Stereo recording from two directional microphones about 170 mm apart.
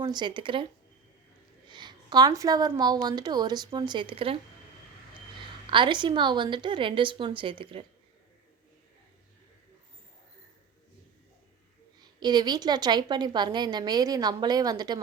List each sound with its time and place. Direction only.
0.0 s a woman's voice: 25° right (ahead or behind)
5.6 s a woman's voice: 30° right (ahead or behind)
11.9 s a woman's voice: 25° right (ahead or behind)